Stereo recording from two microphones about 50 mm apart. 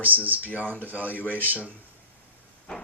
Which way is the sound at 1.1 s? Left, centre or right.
Left.